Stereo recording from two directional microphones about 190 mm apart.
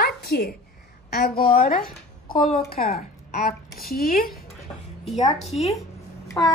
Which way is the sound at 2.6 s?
50° left (ahead or behind).